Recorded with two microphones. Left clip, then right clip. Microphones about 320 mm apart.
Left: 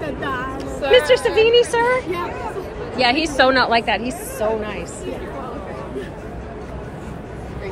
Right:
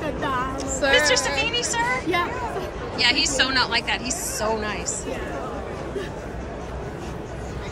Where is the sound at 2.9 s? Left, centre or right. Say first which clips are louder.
Left 4 dB; centre.